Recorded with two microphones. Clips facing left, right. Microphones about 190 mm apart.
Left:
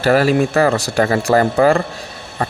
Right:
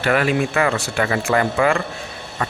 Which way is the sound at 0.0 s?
35° left (ahead or behind).